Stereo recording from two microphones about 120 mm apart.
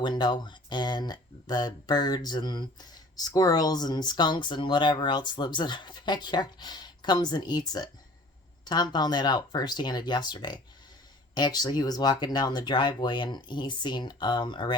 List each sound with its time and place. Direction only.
0.0 s speech: 40° left (ahead or behind)